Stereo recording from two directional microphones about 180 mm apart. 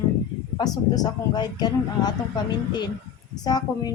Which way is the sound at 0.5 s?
20° left (ahead or behind).